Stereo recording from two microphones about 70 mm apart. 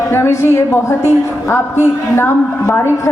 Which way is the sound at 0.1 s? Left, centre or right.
Left.